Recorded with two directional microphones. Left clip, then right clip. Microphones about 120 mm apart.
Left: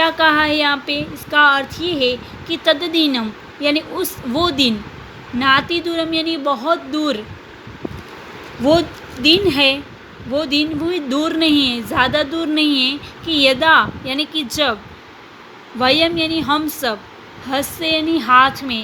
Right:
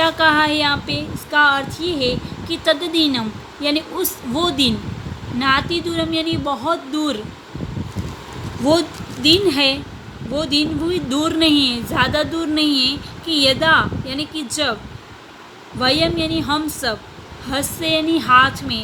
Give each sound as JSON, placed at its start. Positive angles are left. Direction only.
{"t": 0.0, "sound": "female singing", "side_deg": 30}
{"t": 8.6, "sound": "female singing", "side_deg": 20}
{"t": 15.8, "sound": "a woman's voice", "side_deg": 35}
{"t": 17.5, "sound": "female singing", "side_deg": 25}